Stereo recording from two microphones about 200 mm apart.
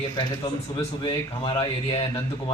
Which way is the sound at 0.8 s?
25° left (ahead or behind).